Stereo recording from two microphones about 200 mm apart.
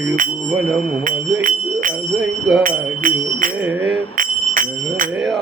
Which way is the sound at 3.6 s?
5° right (ahead or behind).